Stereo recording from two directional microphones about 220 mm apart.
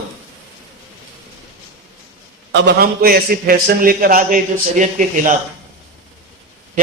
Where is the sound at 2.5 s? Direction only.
50° right (ahead or behind); by 5.3 s 35° right (ahead or behind).